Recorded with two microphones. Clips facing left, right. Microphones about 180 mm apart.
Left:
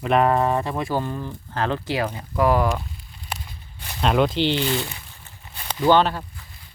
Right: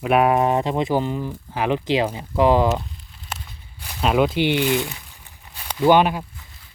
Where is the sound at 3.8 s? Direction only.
5° right (ahead or behind).